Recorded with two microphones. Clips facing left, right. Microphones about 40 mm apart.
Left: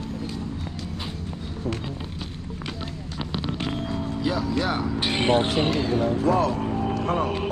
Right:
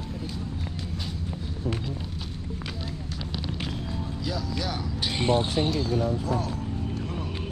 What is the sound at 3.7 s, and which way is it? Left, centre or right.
Speech, left.